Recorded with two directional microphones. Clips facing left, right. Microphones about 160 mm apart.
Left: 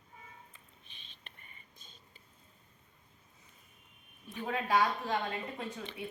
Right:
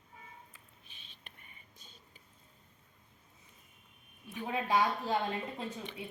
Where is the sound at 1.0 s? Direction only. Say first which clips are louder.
Even; 10° right (ahead or behind).